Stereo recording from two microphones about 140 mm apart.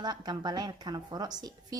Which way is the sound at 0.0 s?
30° right (ahead or behind).